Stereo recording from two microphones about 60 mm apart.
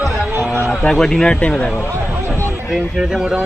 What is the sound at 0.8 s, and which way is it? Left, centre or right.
Speech, centre.